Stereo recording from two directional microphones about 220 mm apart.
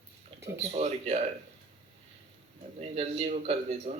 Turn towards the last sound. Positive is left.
turn(degrees=-30)  # may be behind; listen again after turning